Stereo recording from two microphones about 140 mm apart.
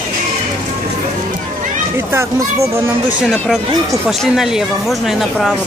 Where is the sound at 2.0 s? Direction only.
20° right (ahead or behind).